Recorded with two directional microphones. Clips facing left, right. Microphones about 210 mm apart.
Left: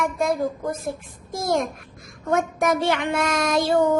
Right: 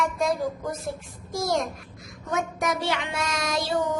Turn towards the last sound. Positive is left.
turn(degrees=55)  # may be behind; listen again after turning